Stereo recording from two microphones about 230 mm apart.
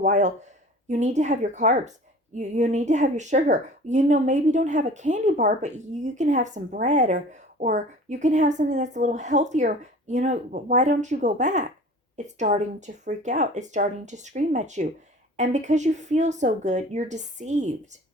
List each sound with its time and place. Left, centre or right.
0.0 s speech: right